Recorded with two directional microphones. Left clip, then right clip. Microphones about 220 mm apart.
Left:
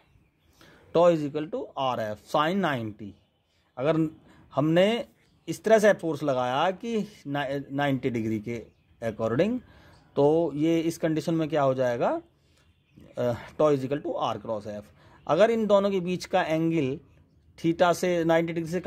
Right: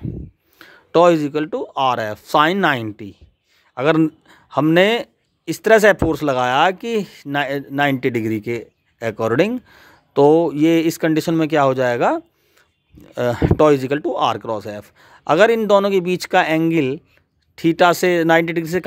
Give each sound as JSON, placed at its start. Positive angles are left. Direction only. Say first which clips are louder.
{"t": 0.6, "sound": "speech", "louder": "right 9 dB", "side_deg": -35}